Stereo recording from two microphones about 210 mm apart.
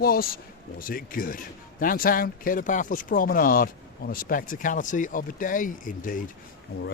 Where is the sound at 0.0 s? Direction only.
45° left (ahead or behind).